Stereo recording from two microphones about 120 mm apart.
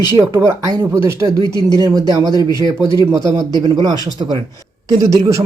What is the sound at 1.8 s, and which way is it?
Speech, 30° right (ahead or behind).